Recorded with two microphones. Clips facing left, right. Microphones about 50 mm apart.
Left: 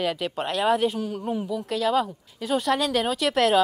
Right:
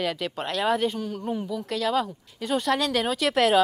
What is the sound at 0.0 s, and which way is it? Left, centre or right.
Speech, centre.